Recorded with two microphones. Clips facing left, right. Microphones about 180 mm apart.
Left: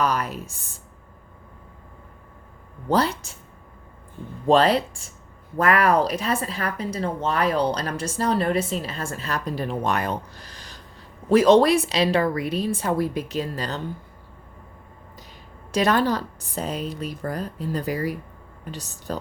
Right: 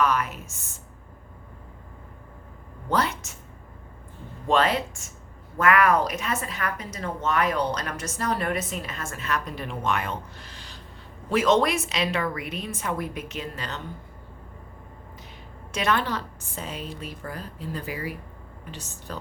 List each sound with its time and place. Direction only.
0.0 s a woman's voice: 35° left (ahead or behind)
2.9 s a woman's voice: 30° left (ahead or behind)
4.4 s a woman's voice: 35° left (ahead or behind)
15.7 s a woman's voice: 35° left (ahead or behind)